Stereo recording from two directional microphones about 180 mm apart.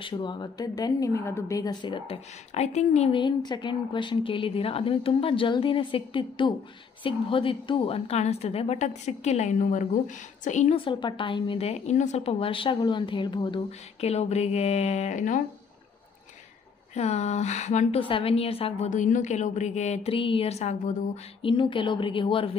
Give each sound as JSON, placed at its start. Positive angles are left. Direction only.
{"t": 0.0, "sound": "a woman's voice", "side_deg": 25}
{"t": 10.8, "sound": "a woman's voice", "side_deg": 25}
{"t": 16.9, "sound": "a woman's voice", "side_deg": 40}